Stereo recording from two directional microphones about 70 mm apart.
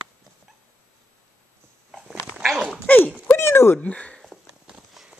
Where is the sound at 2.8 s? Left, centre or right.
Left.